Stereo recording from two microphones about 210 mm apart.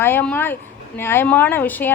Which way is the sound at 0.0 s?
10° left (ahead or behind).